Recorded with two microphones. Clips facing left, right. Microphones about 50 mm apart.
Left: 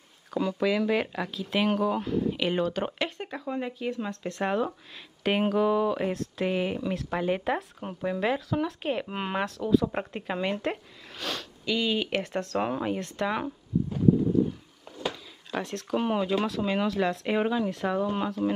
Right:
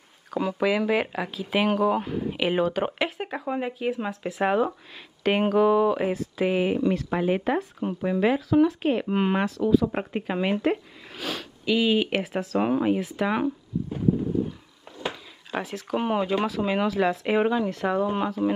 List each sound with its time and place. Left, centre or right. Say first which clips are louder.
0.3 s speech: right 2 dB; centre
3.7 s speech: right 4 dB; centre
15.0 s a sound: right 1 dB; centre
15.6 s speech: right 1 dB; centre